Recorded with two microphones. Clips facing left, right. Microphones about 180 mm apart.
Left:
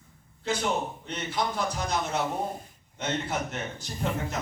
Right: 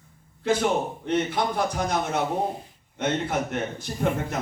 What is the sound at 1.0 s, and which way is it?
Speech, 55° right (ahead or behind).